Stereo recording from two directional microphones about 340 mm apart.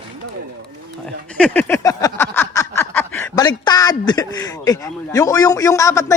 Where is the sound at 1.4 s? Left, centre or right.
Centre.